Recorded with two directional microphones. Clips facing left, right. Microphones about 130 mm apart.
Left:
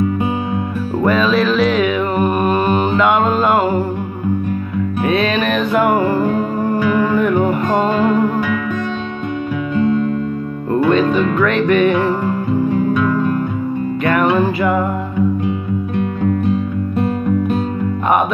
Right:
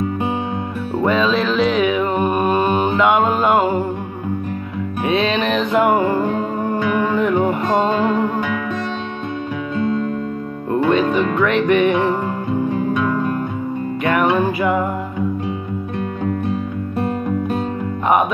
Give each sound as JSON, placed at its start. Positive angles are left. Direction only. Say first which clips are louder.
{"t": 1.0, "sound": "music", "louder": "left 2 dB", "side_deg": -20}
{"t": 5.0, "sound": "music", "louder": "left 1 dB", "side_deg": -20}
{"t": 10.9, "sound": "music", "louder": "left 2 dB", "side_deg": -20}